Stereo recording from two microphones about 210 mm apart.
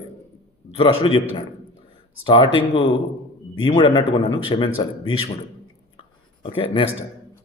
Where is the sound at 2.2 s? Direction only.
25° left (ahead or behind).